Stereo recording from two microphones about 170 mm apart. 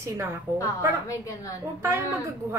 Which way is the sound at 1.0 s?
20° left (ahead or behind).